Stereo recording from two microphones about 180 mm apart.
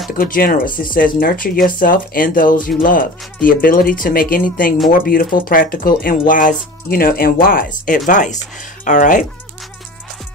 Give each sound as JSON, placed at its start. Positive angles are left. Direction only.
{"t": 0.1, "sound": "speech", "side_deg": 50}